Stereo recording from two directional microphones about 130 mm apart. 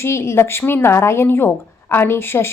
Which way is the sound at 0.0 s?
20° left (ahead or behind).